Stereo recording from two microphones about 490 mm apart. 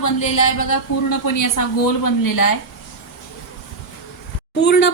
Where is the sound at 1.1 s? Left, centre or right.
Left.